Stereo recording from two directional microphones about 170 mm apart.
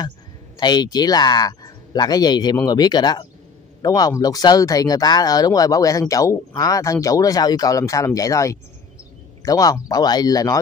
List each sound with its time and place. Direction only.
0.6 s speech: 25° left (ahead or behind)